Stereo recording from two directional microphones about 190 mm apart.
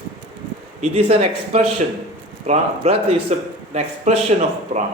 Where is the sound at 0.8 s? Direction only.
30° right (ahead or behind).